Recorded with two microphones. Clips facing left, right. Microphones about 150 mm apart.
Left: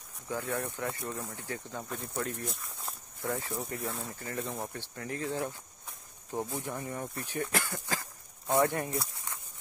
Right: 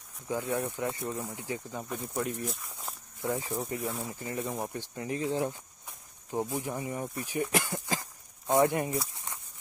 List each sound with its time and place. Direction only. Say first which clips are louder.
0.3 s speech: right 3 dB; 15° right (ahead or behind)
2.4 s speech: right 2 dB; centre (ahead or behind)
3.2 s speech: right 2 dB; 15° right (ahead or behind)
3.5 s speech: right 3 dB; 5° right (ahead or behind)
9.1 s a sound: right 1 dB; 20° right (ahead or behind)